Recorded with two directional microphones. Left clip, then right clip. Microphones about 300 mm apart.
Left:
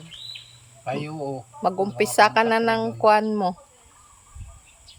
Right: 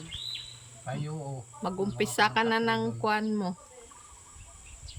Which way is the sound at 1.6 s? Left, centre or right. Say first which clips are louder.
Left 9 dB; centre.